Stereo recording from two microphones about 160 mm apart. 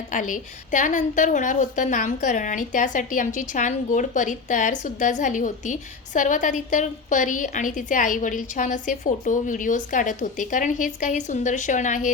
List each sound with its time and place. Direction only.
0.1 s a woman's voice: 55° left (ahead or behind)